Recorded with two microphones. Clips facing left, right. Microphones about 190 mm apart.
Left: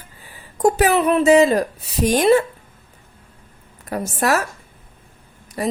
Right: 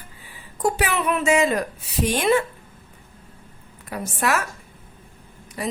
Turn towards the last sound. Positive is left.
turn(degrees=40)  # may be behind; listen again after turning